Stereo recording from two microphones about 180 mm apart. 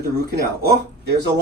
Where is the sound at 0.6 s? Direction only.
65° right (ahead or behind).